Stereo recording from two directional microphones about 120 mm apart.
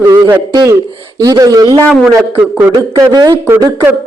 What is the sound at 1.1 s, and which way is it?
Speech, 35° right (ahead or behind).